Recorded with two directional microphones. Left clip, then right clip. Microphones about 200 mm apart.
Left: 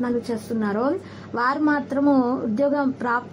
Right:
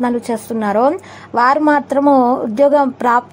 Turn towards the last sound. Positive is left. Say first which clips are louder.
# right 10 dB
turn(degrees=-30)  # may be behind; listen again after turning